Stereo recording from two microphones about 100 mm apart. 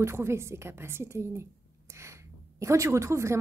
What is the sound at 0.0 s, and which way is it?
A woman's voice, 25° right (ahead or behind).